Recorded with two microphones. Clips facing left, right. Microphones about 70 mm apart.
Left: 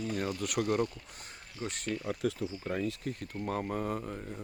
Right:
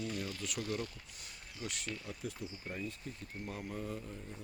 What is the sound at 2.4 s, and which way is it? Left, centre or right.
Speech, left.